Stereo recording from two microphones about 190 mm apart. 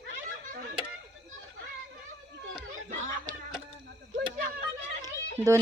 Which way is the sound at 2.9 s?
40° right (ahead or behind).